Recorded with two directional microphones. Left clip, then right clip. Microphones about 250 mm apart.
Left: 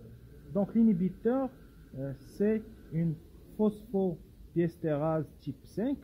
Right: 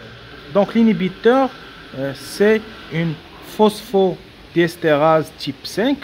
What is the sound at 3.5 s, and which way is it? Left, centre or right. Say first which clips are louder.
Speech: right 16 dB; right.